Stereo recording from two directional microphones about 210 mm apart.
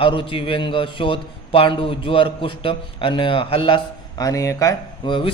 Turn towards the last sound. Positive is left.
turn(degrees=25)  # may be behind; listen again after turning